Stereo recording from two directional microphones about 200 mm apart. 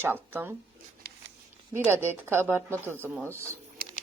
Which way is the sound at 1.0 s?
55° right (ahead or behind).